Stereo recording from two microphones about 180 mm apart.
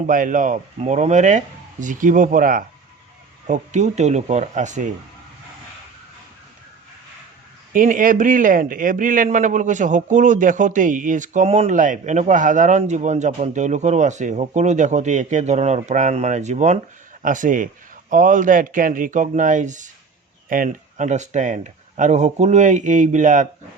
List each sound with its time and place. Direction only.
0.1 s a man's voice: 45° right (ahead or behind)
7.7 s a man's voice: 50° right (ahead or behind)